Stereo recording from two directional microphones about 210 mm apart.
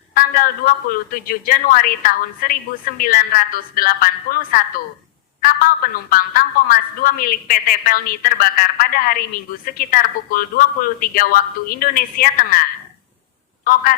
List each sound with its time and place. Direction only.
0.1 s a woman's voice: 40° left (ahead or behind)